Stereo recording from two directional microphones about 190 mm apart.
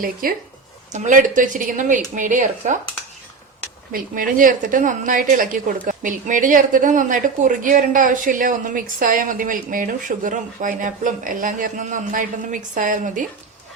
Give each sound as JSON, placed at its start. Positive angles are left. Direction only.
{"t": 0.0, "sound": "a woman's voice", "side_deg": -50}
{"t": 3.9, "sound": "a woman's voice", "side_deg": -45}